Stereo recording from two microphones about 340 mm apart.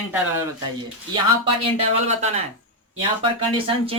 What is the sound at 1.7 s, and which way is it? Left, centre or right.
Speech, centre.